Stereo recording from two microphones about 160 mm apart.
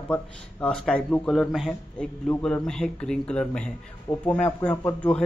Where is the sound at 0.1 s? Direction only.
5° left (ahead or behind).